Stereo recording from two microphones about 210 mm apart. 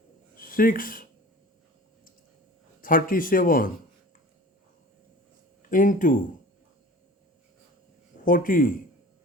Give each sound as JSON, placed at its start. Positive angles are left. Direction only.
{"t": 0.3, "sound": "speech", "side_deg": 40}
{"t": 2.8, "sound": "speech", "side_deg": 40}
{"t": 5.7, "sound": "speech", "side_deg": 40}
{"t": 8.2, "sound": "speech", "side_deg": 40}